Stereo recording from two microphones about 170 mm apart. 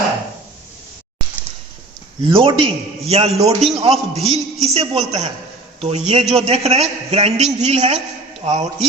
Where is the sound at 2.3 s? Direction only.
30° right (ahead or behind).